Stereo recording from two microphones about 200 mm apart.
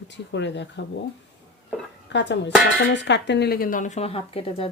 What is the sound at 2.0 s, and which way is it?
Speech, 65° left (ahead or behind).